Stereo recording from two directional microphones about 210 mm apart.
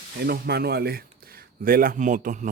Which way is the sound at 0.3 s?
50° right (ahead or behind).